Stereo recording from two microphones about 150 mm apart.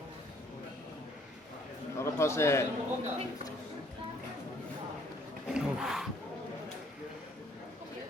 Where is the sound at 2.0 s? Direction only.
20° left (ahead or behind).